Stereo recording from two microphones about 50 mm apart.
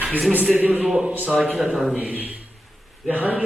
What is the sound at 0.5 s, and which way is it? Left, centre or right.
Speech, right.